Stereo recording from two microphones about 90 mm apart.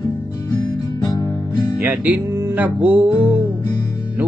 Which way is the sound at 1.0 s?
40° left (ahead or behind).